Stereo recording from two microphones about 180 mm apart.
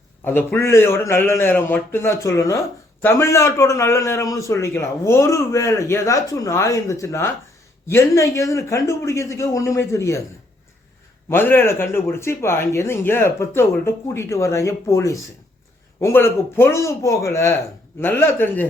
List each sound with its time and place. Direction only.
0.3 s a man's voice: 10° left (ahead or behind)
11.3 s a man's voice: 10° left (ahead or behind)